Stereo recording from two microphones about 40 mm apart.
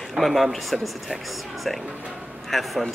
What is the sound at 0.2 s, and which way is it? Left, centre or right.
Speech, centre.